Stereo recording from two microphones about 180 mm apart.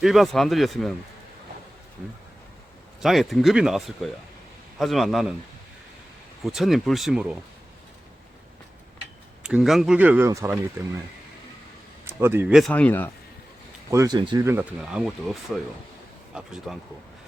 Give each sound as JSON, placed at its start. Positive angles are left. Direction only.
{"t": 0.0, "sound": "speech", "side_deg": 0}
{"t": 3.0, "sound": "speech", "side_deg": 0}
{"t": 6.4, "sound": "speech", "side_deg": 0}
{"t": 9.4, "sound": "speech", "side_deg": -5}
{"t": 12.0, "sound": "speech", "side_deg": -10}
{"t": 12.7, "sound": "speech", "side_deg": 10}
{"t": 13.9, "sound": "speech", "side_deg": -20}
{"t": 14.4, "sound": "speech", "side_deg": -10}